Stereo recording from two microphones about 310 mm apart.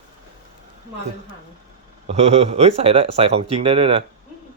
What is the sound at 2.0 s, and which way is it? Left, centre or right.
Speech, centre.